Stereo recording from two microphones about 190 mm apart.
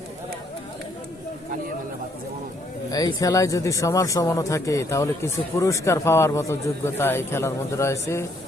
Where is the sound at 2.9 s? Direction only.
20° left (ahead or behind).